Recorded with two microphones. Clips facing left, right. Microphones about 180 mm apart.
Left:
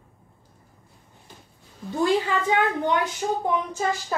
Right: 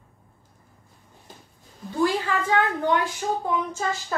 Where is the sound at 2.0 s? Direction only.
20° left (ahead or behind).